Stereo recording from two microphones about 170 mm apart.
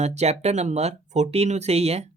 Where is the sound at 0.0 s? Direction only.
40° right (ahead or behind).